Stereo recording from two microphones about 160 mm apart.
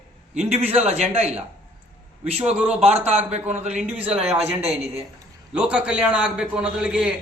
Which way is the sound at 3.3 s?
45° right (ahead or behind).